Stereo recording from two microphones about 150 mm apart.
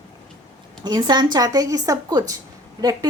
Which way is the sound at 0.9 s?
30° right (ahead or behind).